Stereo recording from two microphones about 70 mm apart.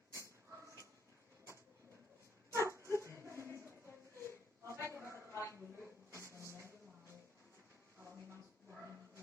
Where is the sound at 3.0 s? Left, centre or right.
Right.